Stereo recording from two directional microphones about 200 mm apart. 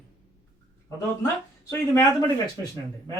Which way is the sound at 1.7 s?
15° left (ahead or behind).